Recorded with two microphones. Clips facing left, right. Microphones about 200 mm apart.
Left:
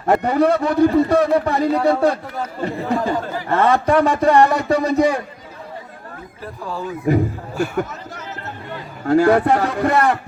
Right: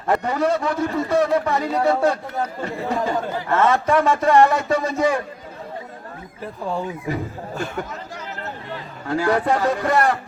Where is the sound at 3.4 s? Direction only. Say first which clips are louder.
Left 3 dB; 35° left (ahead or behind).